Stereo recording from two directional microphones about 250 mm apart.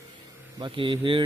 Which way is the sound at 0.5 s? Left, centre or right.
Centre.